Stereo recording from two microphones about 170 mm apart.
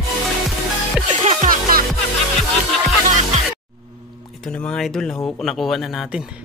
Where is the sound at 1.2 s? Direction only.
50° right (ahead or behind).